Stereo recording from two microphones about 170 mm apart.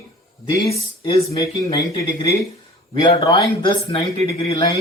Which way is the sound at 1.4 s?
20° left (ahead or behind).